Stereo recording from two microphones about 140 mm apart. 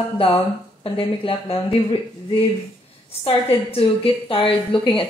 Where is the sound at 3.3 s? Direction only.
40° left (ahead or behind).